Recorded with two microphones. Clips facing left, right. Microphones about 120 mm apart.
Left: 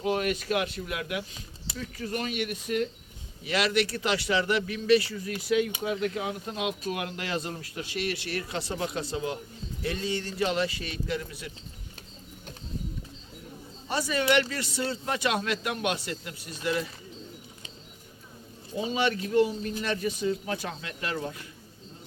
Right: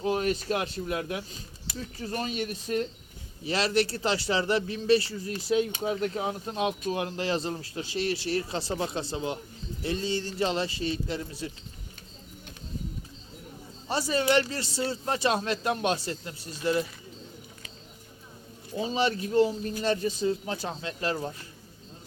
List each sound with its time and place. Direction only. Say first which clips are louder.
0.1 s speech: even; 30° right (ahead or behind)
13.8 s speech: right 1 dB; 30° right (ahead or behind)
18.9 s speech: even; 30° right (ahead or behind)